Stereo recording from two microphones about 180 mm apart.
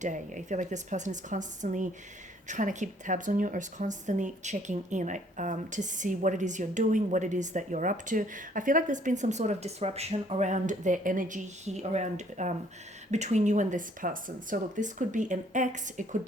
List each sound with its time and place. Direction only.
0.0 s a woman's voice: 45° right (ahead or behind)